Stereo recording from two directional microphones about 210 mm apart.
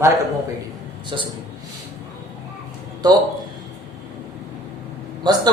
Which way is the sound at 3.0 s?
20° right (ahead or behind).